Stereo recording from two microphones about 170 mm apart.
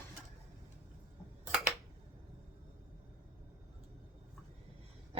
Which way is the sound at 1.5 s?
Centre (ahead or behind).